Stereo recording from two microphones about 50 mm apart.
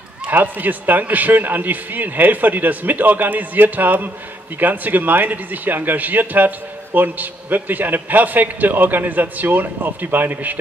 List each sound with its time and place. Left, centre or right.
0.3 s speech: right